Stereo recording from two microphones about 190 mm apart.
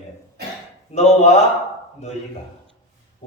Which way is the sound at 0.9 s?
35° left (ahead or behind).